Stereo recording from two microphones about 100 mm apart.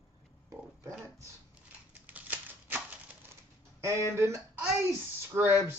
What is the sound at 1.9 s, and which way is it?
Typewriter, 15° right (ahead or behind).